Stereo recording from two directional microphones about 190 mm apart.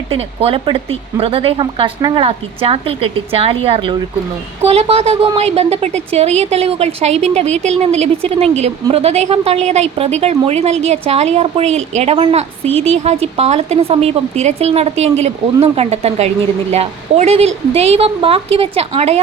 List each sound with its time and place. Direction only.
0.1 s a woman's voice: 30° right (ahead or behind)